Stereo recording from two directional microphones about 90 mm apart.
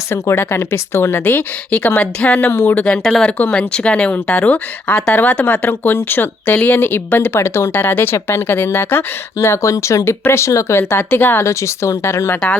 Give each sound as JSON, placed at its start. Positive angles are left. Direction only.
{"t": 0.1, "sound": "speech", "side_deg": 30}
{"t": 2.5, "sound": "speech", "side_deg": 25}
{"t": 2.8, "sound": "speech", "side_deg": 10}